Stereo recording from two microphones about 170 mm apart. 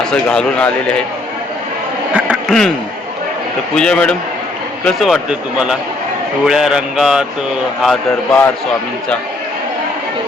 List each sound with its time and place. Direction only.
0.0 s speech: 5° left (ahead or behind)
2.3 s a sound: centre (ahead or behind)
3.8 s speech: 5° left (ahead or behind)